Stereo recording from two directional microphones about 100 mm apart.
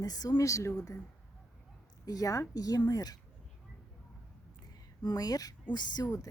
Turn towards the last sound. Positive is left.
turn(degrees=40)  # may be behind; listen again after turning